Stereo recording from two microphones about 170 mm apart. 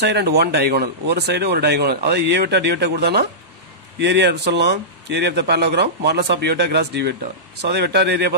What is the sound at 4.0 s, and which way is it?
A man's voice, 85° right.